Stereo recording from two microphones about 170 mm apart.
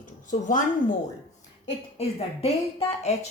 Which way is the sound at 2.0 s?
35° left (ahead or behind).